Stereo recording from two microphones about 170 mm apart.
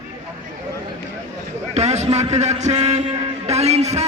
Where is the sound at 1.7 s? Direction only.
40° right (ahead or behind).